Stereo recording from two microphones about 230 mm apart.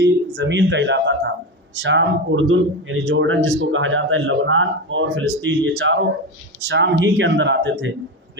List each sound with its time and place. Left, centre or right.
0.0 s a man's voice: right